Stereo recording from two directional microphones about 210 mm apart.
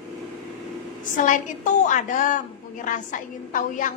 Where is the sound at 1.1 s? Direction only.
40° left (ahead or behind).